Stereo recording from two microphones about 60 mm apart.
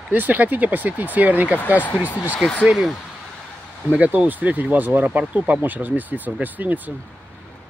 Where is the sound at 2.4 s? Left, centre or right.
Right.